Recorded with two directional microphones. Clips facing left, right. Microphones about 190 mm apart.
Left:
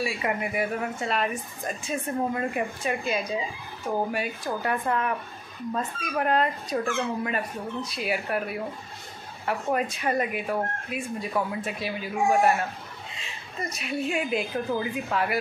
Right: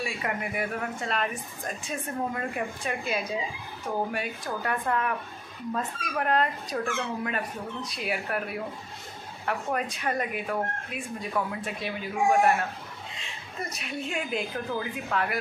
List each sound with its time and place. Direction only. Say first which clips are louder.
0.0 s a woman's voice: left 4 dB; 5° left (ahead or behind)